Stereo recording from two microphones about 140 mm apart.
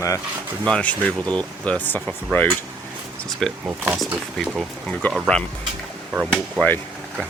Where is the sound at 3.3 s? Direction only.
Centre (ahead or behind).